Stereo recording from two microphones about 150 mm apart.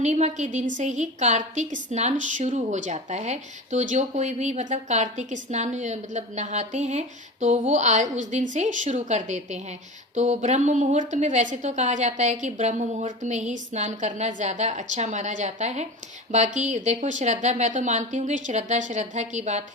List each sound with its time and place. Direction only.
0.0 s a woman's voice: 50° right (ahead or behind)